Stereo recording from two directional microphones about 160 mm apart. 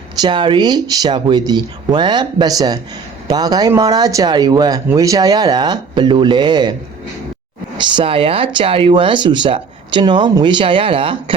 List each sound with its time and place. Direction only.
0.2 s speech: 30° right (ahead or behind)
7.8 s speech: 30° right (ahead or behind)